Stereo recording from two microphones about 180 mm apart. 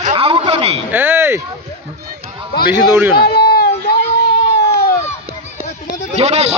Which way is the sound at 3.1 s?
60° left (ahead or behind).